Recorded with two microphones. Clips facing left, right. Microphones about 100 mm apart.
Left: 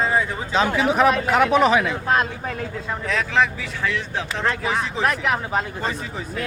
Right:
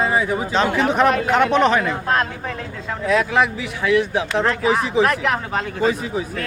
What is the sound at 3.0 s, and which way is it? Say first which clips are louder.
Speech: right 4 dB; 10° right (ahead or behind).